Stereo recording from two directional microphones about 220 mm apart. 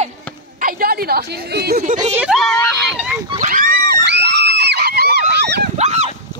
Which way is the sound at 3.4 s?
40° right (ahead or behind).